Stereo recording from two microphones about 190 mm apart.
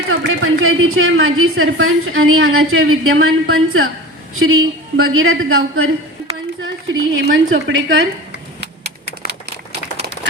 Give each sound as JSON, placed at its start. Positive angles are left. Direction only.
{"t": 0.1, "sound": "a woman's voice", "side_deg": -90}
{"t": 8.6, "sound": "typing", "side_deg": -60}